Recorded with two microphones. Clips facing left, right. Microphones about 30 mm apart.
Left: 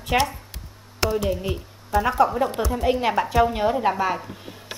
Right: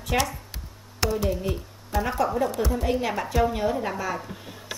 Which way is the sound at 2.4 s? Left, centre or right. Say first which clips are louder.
Left 2 dB; left.